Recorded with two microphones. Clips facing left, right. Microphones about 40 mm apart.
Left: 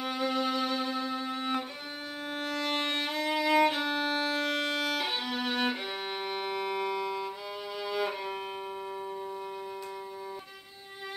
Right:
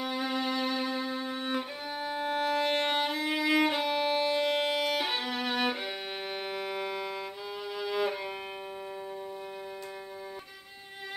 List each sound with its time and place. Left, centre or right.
0.1 s music: centre
2.4 s violin: centre
6.2 s music: centre